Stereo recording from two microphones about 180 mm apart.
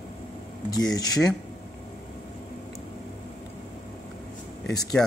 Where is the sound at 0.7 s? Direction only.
20° left (ahead or behind).